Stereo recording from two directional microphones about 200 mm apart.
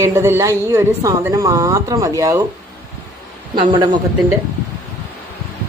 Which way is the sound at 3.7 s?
20° right (ahead or behind).